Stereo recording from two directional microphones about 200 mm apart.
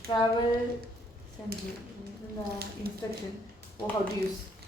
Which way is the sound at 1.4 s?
5° left (ahead or behind).